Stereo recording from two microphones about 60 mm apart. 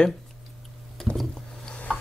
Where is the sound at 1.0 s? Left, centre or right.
Centre.